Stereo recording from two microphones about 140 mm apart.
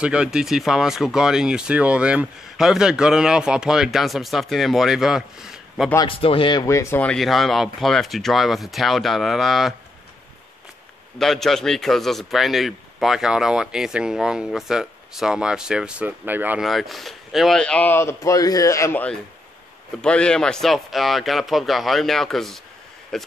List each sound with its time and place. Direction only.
0.0 s speech: 5° right (ahead or behind)
5.9 s speech: 40° left (ahead or behind)
6.6 s speech: 20° left (ahead or behind); by 9.8 s centre (ahead or behind)
11.1 s speech: 5° left (ahead or behind); by 16.6 s 15° right (ahead or behind)
16.6 s speech: centre (ahead or behind)